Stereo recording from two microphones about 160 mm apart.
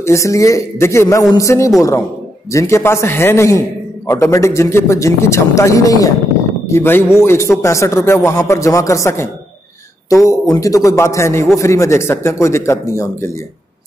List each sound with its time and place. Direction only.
0.0 s a man's voice: 20° left (ahead or behind)